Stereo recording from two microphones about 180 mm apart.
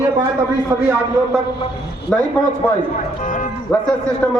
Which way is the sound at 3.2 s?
50° left (ahead or behind).